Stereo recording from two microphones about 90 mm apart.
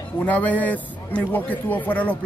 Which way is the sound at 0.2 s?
15° left (ahead or behind).